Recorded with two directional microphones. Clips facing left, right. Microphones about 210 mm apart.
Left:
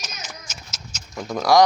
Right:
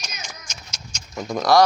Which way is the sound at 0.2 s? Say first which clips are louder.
Left 1 dB; 5° left (ahead or behind).